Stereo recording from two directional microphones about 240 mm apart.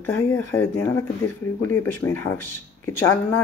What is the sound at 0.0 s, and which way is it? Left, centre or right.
Speech, centre.